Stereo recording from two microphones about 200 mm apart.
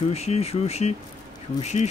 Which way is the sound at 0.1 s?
30° left (ahead or behind).